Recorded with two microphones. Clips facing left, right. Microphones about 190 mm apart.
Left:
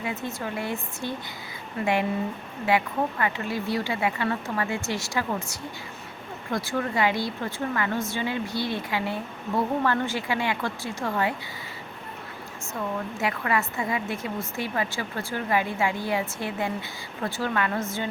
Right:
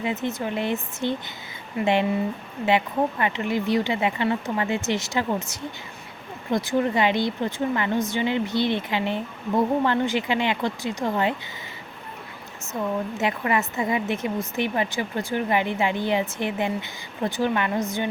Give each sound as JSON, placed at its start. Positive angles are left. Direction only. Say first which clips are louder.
{"t": 0.0, "sound": "a woman's voice", "louder": "right 5 dB", "side_deg": -20}
{"t": 13.1, "sound": "a woman's voice", "louder": "right 1 dB", "side_deg": -20}